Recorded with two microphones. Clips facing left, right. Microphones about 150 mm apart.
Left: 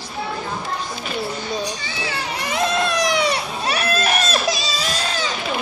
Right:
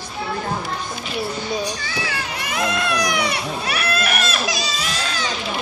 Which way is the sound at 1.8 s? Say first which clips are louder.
Even; 25° left (ahead or behind).